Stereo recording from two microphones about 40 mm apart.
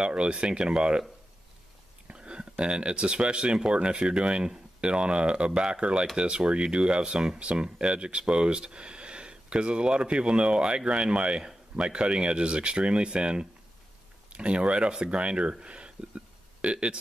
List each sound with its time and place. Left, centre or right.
0.0 s speech: right
2.0 s speech: right